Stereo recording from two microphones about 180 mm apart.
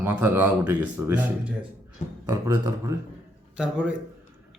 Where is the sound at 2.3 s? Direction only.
20° right (ahead or behind).